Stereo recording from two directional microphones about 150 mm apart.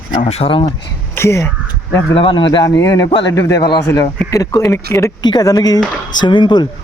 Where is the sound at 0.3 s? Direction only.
40° left (ahead or behind).